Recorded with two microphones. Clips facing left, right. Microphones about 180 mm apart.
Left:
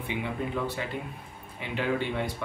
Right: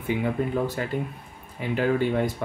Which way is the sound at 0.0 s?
45° right (ahead or behind).